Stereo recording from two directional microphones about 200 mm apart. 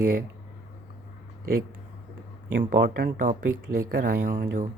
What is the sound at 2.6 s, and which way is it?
Speech, 45° right (ahead or behind).